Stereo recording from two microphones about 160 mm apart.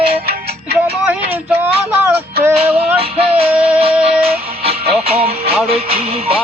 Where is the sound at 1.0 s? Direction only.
10° right (ahead or behind).